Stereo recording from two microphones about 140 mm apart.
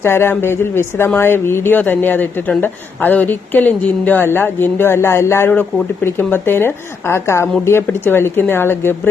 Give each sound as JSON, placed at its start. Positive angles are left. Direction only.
{"t": 0.0, "sound": "speech", "side_deg": 15}